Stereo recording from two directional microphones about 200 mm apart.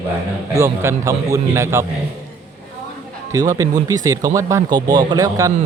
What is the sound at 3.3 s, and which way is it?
Speech, 15° right (ahead or behind).